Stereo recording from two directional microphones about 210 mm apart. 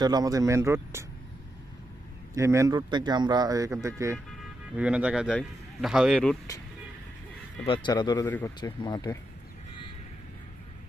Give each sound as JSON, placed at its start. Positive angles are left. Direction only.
{"t": 0.0, "sound": "speech", "side_deg": -20}
{"t": 2.3, "sound": "speech", "side_deg": -15}
{"t": 7.7, "sound": "speech", "side_deg": 20}